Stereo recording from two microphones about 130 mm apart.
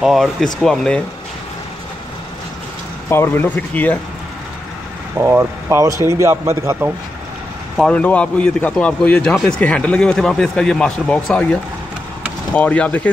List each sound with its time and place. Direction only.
0.0 s speech: centre (ahead or behind)
3.1 s a man's voice: 15° left (ahead or behind)
5.2 s speech: 20° right (ahead or behind)
7.7 s a man's voice: 5° left (ahead or behind)
12.5 s a man's voice: 10° left (ahead or behind)